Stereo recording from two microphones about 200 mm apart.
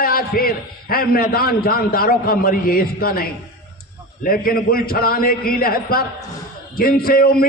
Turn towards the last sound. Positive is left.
turn(degrees=50)  # may be behind; listen again after turning